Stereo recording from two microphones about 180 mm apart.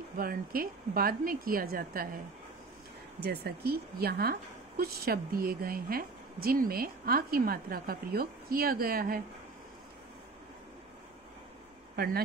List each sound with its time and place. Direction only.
0.2 s a woman's voice: 55° right (ahead or behind)
3.2 s speech: 60° right (ahead or behind)
11.9 s speech: 60° right (ahead or behind)